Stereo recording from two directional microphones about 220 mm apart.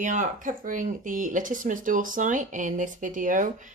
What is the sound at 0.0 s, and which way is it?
Speech, 35° right (ahead or behind).